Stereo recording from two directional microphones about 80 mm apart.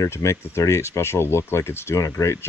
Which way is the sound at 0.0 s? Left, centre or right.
Left.